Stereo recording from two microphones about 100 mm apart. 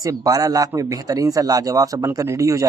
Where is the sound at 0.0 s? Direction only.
35° right (ahead or behind).